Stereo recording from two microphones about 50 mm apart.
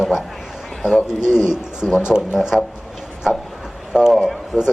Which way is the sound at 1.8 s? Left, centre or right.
Centre.